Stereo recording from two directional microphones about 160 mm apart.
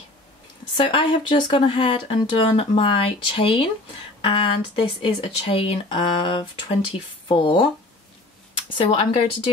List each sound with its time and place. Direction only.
0.7 s speech: 30° left (ahead or behind)
8.7 s speech: 35° left (ahead or behind)